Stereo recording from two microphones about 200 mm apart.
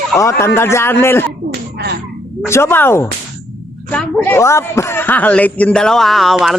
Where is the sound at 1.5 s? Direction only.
55° right (ahead or behind).